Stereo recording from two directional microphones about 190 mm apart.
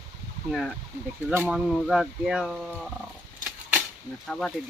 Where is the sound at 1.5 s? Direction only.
5° right (ahead or behind).